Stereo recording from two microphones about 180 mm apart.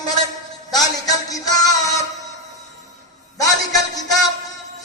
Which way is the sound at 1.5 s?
20° left (ahead or behind).